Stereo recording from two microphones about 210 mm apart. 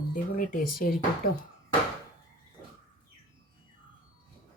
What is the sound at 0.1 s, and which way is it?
Speech, 40° left (ahead or behind).